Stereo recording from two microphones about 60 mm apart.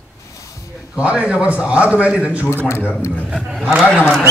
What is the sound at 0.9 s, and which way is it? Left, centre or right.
A man's voice, centre.